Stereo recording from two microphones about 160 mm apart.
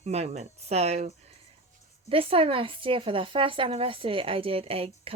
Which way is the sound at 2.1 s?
35° right (ahead or behind).